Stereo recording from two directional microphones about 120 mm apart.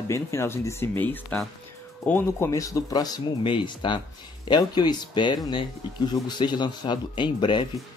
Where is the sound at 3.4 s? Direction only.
40° left (ahead or behind).